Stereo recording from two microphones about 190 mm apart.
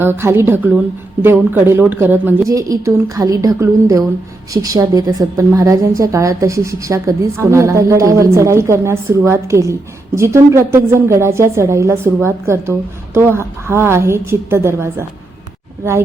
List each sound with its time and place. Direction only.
0.0 s a woman's voice: 10° right (ahead or behind)